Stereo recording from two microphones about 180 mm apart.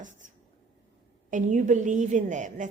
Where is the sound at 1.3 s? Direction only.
45° right (ahead or behind).